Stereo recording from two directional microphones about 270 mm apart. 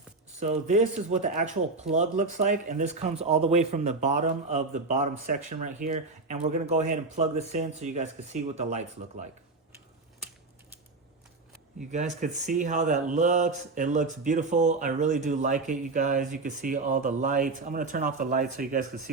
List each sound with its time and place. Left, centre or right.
0.3 s speech: right
11.9 s speech: right